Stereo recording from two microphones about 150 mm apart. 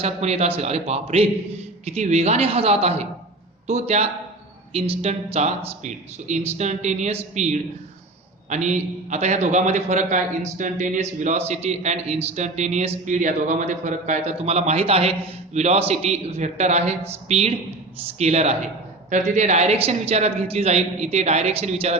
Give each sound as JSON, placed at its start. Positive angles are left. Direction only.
{"t": 0.0, "sound": "a man's voice", "side_deg": -45}